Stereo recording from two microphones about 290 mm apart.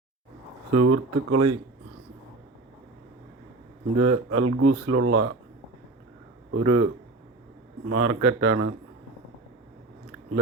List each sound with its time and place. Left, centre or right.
0.8 s speech: right
3.9 s speech: right
6.5 s speech: right
7.9 s speech: right